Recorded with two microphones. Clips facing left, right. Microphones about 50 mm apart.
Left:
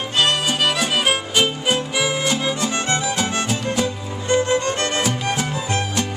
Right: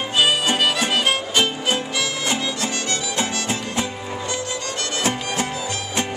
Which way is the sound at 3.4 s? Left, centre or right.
Right.